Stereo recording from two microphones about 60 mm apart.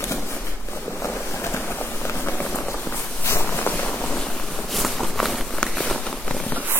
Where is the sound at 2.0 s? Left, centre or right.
Left.